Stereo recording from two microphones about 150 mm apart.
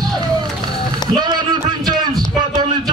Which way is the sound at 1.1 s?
30° right (ahead or behind).